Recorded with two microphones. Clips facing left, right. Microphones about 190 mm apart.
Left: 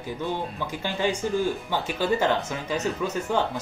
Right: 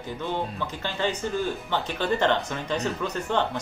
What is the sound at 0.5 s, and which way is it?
Speech, 10° left (ahead or behind).